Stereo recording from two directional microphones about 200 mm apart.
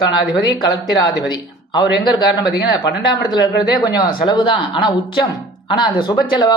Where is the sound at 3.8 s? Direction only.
20° left (ahead or behind).